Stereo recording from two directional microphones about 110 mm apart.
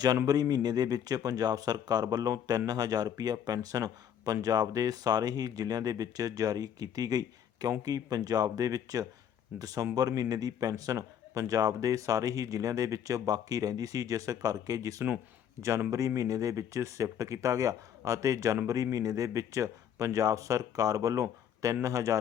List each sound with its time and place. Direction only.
0.3 s speech: 35° right (ahead or behind)